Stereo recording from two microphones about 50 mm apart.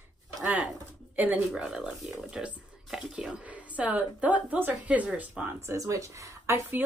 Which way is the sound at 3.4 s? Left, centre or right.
Right.